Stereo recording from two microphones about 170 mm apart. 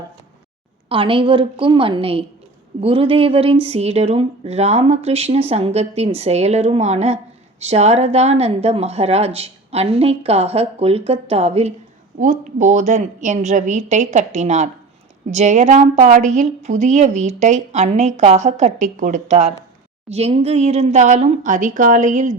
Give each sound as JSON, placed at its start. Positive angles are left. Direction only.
{"t": 0.9, "sound": "a woman's voice", "side_deg": -30}
{"t": 12.2, "sound": "a woman's voice", "side_deg": -50}